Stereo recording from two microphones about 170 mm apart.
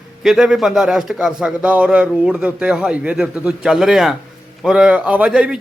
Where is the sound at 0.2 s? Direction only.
5° right (ahead or behind).